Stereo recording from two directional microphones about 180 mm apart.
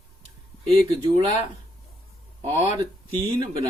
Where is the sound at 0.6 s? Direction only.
35° right (ahead or behind).